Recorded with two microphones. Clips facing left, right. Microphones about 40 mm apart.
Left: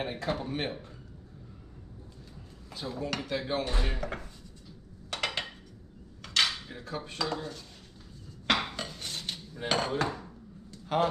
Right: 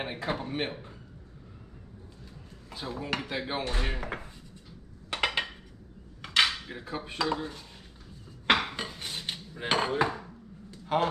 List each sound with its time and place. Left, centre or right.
0.0 s speech: centre
2.7 s speech: centre
5.1 s dishes: right
6.2 s cutlery: centre
8.5 s dishes: right
10.7 s a sound: centre